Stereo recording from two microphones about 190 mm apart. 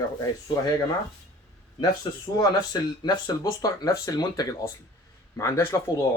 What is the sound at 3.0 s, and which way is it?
Speech, 20° left (ahead or behind).